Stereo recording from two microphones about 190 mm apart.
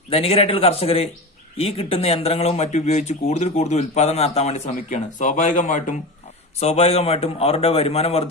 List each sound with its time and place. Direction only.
0.1 s speech: 30° left (ahead or behind)